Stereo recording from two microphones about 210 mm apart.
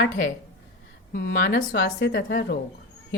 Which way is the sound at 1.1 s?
50° left (ahead or behind).